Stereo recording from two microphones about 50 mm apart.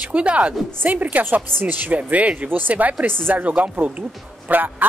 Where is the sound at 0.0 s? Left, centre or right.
Right.